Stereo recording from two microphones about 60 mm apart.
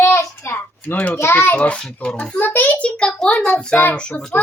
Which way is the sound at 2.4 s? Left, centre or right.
Left.